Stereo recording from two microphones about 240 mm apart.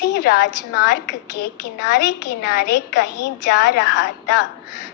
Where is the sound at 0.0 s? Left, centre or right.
Left.